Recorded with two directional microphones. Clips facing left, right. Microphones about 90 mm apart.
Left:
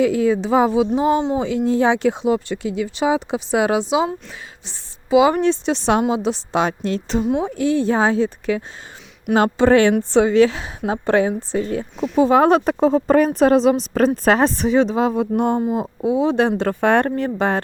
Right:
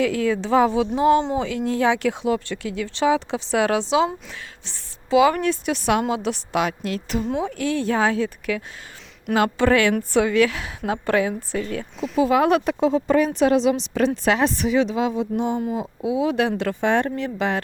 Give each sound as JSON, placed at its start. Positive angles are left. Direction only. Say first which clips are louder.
{"t": 0.0, "sound": "speech", "louder": "left 4 dB", "side_deg": 20}
{"t": 7.3, "sound": "speech", "louder": "left 5 dB", "side_deg": 10}
{"t": 11.9, "sound": "speech", "louder": "left 4 dB", "side_deg": 0}
{"t": 12.2, "sound": "speech", "louder": "left 4 dB", "side_deg": 35}
{"t": 15.2, "sound": "speech", "louder": "left 5 dB", "side_deg": 55}
{"t": 16.0, "sound": "speech", "louder": "left 4 dB", "side_deg": 35}
{"t": 16.8, "sound": "speech", "louder": "left 4 dB", "side_deg": 55}